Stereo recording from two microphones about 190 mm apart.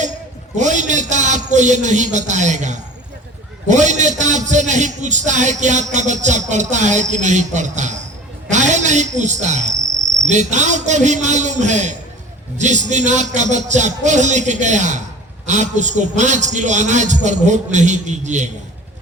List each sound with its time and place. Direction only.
0.0 s a man's voice: 40° right (ahead or behind)